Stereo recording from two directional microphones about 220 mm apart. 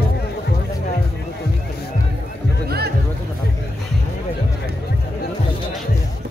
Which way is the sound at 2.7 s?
45° right (ahead or behind).